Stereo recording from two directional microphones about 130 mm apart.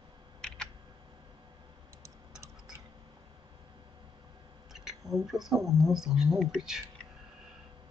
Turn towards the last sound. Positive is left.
turn(degrees=-5)  # may be behind; listen again after turning